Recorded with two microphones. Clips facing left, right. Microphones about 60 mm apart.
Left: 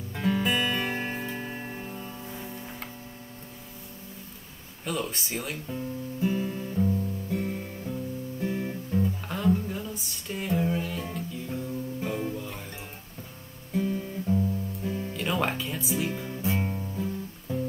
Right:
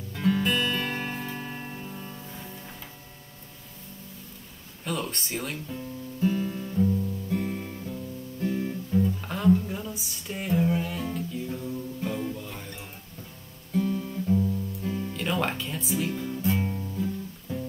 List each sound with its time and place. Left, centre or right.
0.1 s music: centre
2.0 s music: centre
4.8 s speech: centre
5.7 s guitar: centre
9.3 s music: centre
12.0 s music: centre
13.7 s guitar: centre